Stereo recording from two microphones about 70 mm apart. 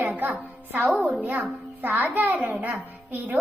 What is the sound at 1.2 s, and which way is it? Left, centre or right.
A woman's voice, right.